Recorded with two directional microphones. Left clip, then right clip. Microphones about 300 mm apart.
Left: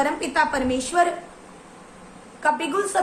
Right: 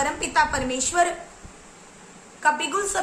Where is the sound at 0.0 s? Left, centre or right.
Centre.